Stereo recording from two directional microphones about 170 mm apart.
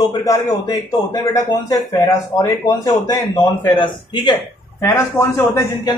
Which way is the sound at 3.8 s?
30° left (ahead or behind).